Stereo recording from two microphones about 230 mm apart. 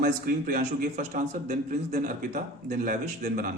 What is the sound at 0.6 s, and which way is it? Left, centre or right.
A man's voice, right.